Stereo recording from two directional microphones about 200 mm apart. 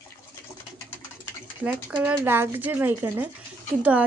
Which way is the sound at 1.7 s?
5° right (ahead or behind).